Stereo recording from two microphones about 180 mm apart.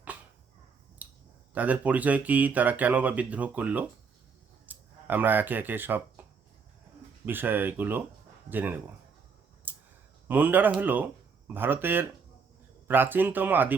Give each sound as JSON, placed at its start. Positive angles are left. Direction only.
{"t": 1.0, "sound": "clicking", "side_deg": -10}
{"t": 1.5, "sound": "speech", "side_deg": -10}
{"t": 6.2, "sound": "a sound", "side_deg": -10}
{"t": 7.3, "sound": "speech", "side_deg": -10}
{"t": 9.7, "sound": "clicking", "side_deg": -10}
{"t": 10.2, "sound": "speech", "side_deg": -10}